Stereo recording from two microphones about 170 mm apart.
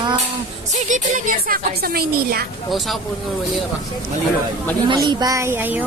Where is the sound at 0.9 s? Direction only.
50° right (ahead or behind).